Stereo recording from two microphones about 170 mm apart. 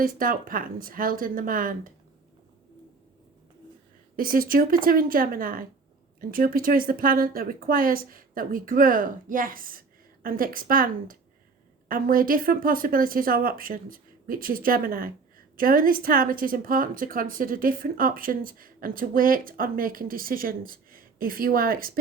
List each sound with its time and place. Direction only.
0.0 s speech: 55° right (ahead or behind)
4.2 s speech: 60° right (ahead or behind)